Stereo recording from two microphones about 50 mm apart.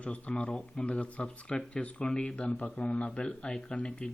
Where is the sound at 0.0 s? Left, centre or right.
Left.